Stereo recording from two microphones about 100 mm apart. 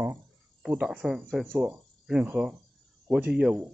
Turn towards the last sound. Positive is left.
turn(degrees=-10)  # may be behind; listen again after turning